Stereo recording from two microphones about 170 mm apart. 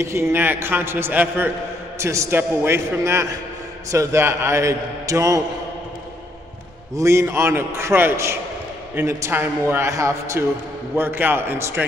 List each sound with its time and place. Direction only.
0.0 s a man's voice: 15° right (ahead or behind)
7.0 s a man's voice: 15° right (ahead or behind)